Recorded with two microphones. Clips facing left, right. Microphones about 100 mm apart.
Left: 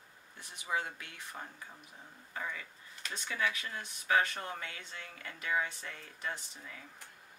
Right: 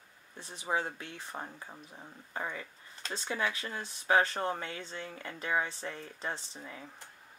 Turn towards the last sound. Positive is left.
turn(degrees=-30)  # may be behind; listen again after turning